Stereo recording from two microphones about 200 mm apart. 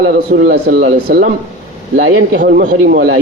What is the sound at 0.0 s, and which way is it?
Speech, 50° right (ahead or behind).